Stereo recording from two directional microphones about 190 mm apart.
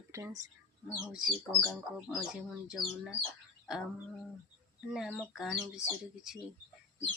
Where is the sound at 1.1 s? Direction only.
Centre (ahead or behind).